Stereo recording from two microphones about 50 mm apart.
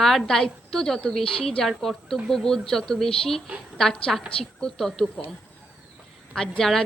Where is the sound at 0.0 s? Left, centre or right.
Centre.